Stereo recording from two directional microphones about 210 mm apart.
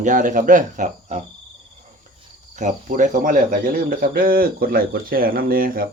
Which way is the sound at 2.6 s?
35° right (ahead or behind).